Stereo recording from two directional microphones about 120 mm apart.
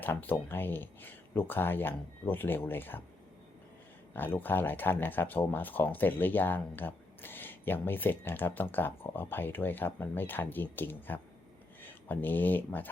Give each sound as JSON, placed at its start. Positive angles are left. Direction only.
{"t": 0.0, "sound": "speech", "side_deg": 15}
{"t": 4.1, "sound": "speech", "side_deg": 15}